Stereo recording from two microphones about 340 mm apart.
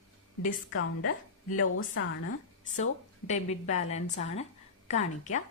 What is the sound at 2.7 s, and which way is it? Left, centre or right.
Speech, left.